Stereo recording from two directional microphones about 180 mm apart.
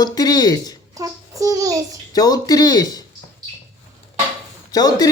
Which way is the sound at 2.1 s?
20° left (ahead or behind).